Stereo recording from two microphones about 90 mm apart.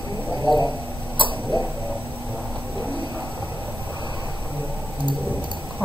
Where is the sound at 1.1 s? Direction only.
65° right (ahead or behind).